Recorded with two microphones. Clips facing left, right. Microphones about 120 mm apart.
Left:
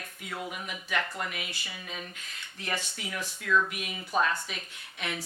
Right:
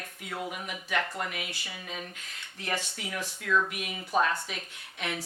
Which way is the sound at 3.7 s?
50° right (ahead or behind).